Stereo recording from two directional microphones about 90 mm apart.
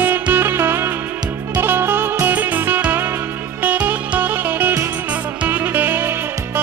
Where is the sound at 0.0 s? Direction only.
25° right (ahead or behind).